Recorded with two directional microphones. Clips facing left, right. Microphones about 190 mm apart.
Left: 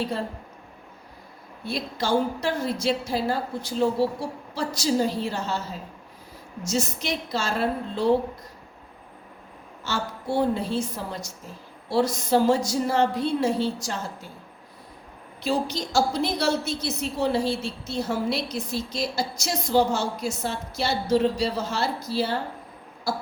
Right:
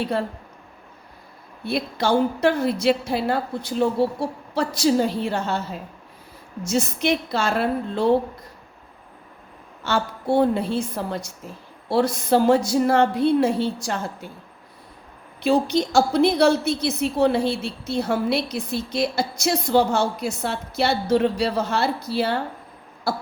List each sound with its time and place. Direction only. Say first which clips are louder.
1.6 s a woman's voice: right 5 dB; 60° right (ahead or behind)
9.8 s a woman's voice: right 6 dB; 55° right (ahead or behind)
15.4 s a woman's voice: right 7 dB; 60° right (ahead or behind)